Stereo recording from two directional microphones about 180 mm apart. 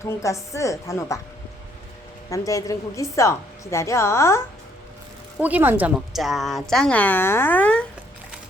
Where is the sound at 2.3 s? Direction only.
20° left (ahead or behind).